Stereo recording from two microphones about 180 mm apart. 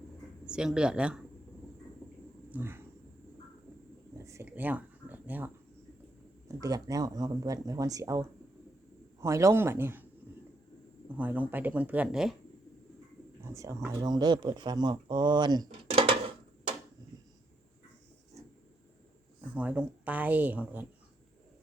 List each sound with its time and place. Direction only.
0.5 s speech: 5° right (ahead or behind)
2.5 s speech: 10° right (ahead or behind)
4.2 s a sound: 15° right (ahead or behind)
6.6 s speech: 20° right (ahead or behind)
11.2 s speech: 10° right (ahead or behind)
13.4 s speech: 15° right (ahead or behind)
19.4 s speech: 5° right (ahead or behind)